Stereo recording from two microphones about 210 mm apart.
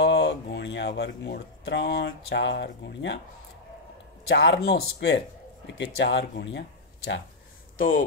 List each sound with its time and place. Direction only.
0.0 s speech: 55° left (ahead or behind)
4.3 s speech: 65° left (ahead or behind)
7.7 s speech: 40° left (ahead or behind)